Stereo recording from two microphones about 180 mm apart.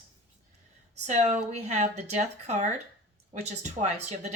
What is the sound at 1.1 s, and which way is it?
Speech, 40° right (ahead or behind).